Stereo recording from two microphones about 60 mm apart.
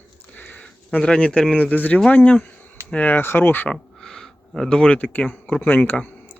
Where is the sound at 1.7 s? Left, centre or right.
Left.